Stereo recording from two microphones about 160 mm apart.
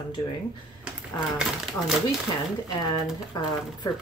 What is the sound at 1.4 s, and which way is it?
Speech, centre (ahead or behind).